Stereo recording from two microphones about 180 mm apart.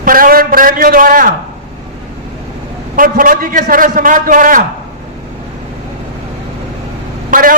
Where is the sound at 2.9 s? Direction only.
50° right (ahead or behind).